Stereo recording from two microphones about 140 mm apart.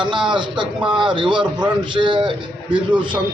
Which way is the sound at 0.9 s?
35° right (ahead or behind).